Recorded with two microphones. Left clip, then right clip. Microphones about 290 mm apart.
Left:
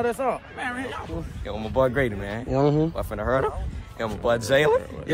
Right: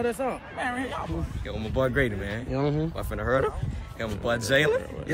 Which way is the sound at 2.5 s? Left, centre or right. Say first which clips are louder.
Left 7 dB; left.